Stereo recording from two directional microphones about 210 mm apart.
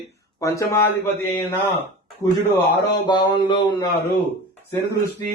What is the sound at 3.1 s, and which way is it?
Speech, 20° left (ahead or behind).